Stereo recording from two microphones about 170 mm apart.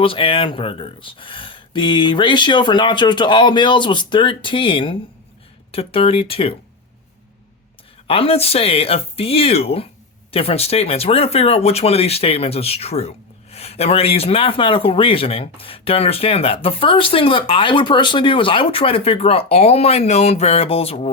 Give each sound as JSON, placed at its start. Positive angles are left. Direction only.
{"t": 0.0, "sound": "speech", "side_deg": 30}
{"t": 8.0, "sound": "speech", "side_deg": 35}